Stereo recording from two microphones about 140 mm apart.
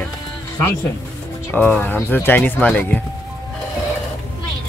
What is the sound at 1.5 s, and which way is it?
Speech, 10° left (ahead or behind).